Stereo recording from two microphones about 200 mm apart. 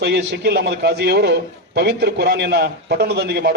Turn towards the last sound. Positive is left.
turn(degrees=-55)  # may be behind; listen again after turning